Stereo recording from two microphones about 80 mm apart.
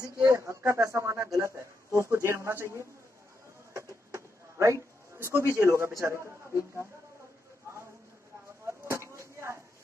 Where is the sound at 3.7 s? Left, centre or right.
Right.